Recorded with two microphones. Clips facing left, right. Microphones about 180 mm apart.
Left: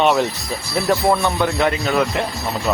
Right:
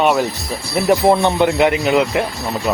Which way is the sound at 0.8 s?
20° right (ahead or behind).